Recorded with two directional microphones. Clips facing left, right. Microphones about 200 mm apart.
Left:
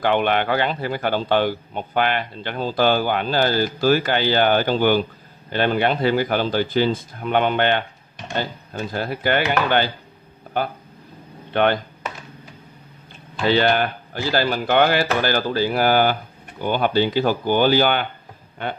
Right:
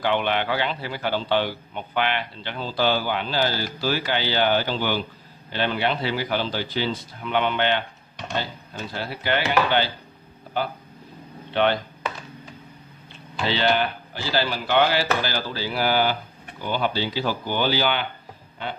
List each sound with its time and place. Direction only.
0.0 s a man's voice: 50° left (ahead or behind)
11.5 s speech: 50° left (ahead or behind)
13.5 s a man's voice: 50° left (ahead or behind)